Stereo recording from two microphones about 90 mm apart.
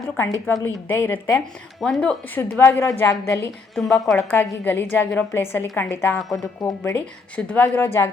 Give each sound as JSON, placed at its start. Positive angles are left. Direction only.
{"t": 0.6, "sound": "a woman's voice", "side_deg": 25}
{"t": 1.8, "sound": "speech", "side_deg": 5}
{"t": 2.6, "sound": "a woman's voice", "side_deg": 25}
{"t": 3.8, "sound": "a woman's voice", "side_deg": 0}
{"t": 4.3, "sound": "a woman's voice", "side_deg": 20}
{"t": 6.1, "sound": "a woman's voice", "side_deg": 0}
{"t": 6.4, "sound": "a woman's voice", "side_deg": 35}
{"t": 6.9, "sound": "a woman's voice", "side_deg": 15}